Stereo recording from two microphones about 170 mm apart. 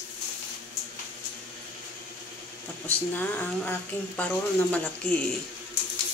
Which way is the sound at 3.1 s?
10° left (ahead or behind).